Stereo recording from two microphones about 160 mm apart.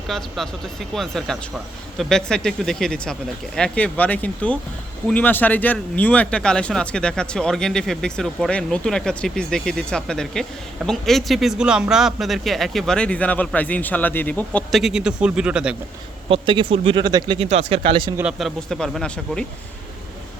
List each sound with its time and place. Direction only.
0.1 s speech: 5° left (ahead or behind)
16.3 s speech: 30° right (ahead or behind)
18.2 s speech: 5° right (ahead or behind)